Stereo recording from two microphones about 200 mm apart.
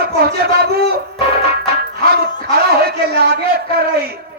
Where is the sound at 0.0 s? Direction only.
50° right (ahead or behind).